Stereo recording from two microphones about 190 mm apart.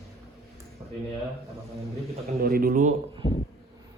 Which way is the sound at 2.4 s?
50° right (ahead or behind).